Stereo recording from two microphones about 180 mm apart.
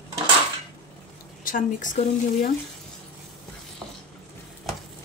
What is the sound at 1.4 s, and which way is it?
Speech, 45° left (ahead or behind).